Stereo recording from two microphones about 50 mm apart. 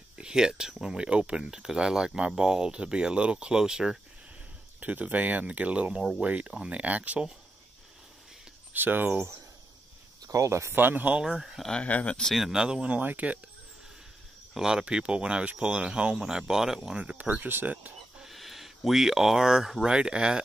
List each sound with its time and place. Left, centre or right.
0.2 s speech: centre
4.7 s speech: right
8.7 s speech: right
10.3 s speech: right
10.7 s speech: right
11.2 s speech: centre
11.8 s speech: left
12.4 s speech: centre
12.6 s speech: centre
12.9 s speech: right
14.5 s speech: centre
17.5 s speech: right
18.2 s a sound: centre
19.8 s speech: centre